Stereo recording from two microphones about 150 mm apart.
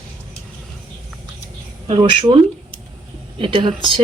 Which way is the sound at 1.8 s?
40° right (ahead or behind).